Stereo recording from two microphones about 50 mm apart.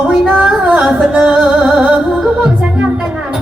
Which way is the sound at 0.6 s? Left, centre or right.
Right.